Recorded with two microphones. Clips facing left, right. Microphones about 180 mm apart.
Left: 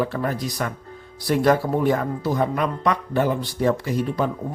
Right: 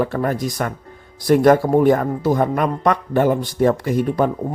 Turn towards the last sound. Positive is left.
turn(degrees=-55)  # may be behind; listen again after turning